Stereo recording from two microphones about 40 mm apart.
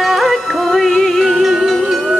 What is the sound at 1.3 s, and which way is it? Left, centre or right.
Music, centre.